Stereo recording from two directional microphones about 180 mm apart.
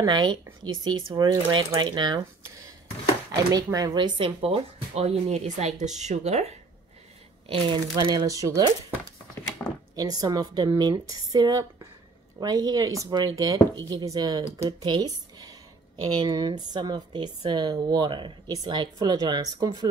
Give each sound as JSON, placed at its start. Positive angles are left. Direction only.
{"t": 0.0, "sound": "a woman's voice", "side_deg": -25}
{"t": 9.6, "sound": "speech", "side_deg": 10}
{"t": 9.9, "sound": "a woman's voice", "side_deg": -20}